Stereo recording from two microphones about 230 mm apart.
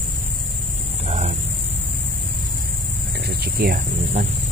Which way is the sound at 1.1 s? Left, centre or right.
Right.